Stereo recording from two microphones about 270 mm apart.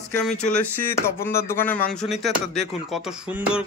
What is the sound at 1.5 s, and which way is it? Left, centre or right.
Speech, centre.